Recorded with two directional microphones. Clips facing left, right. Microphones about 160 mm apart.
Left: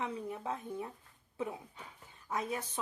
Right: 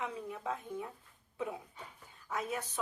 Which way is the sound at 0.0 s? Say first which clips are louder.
Left 1 dB; 30° left (ahead or behind).